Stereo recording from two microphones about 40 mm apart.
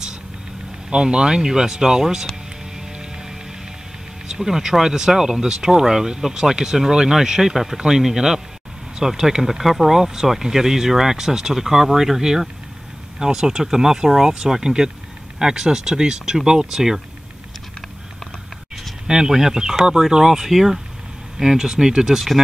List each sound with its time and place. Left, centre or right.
0.8 s speech: right
4.3 s speech: centre
19.0 s speech: centre